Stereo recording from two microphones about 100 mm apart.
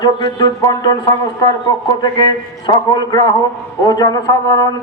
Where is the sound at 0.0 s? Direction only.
45° left (ahead or behind).